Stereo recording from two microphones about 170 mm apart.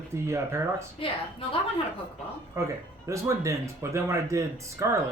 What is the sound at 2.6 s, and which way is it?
Speech, 15° right (ahead or behind).